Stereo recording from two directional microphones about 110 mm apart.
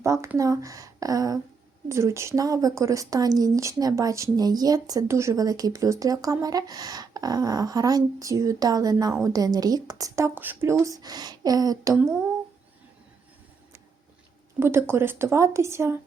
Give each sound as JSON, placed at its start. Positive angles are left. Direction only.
{"t": 0.0, "sound": "a woman's voice", "side_deg": -25}
{"t": 14.6, "sound": "a woman's voice", "side_deg": -20}